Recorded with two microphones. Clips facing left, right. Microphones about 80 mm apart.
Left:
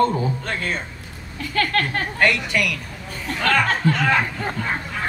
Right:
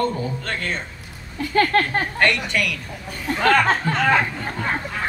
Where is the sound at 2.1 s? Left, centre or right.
Centre.